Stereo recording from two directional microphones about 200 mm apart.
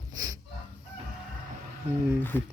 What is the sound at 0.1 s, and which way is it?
Fowl, 15° right (ahead or behind).